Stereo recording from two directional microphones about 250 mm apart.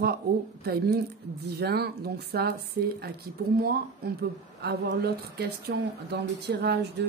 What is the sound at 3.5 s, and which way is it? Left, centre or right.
Speech, right.